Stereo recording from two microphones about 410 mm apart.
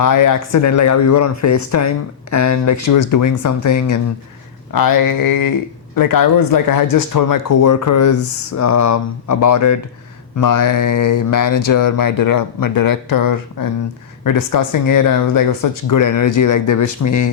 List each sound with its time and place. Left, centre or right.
0.0 s speech: left